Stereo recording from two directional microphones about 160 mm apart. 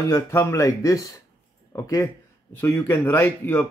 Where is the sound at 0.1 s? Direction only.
20° left (ahead or behind).